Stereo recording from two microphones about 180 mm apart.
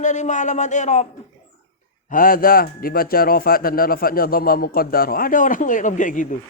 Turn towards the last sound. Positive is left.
turn(degrees=45)  # may be behind; listen again after turning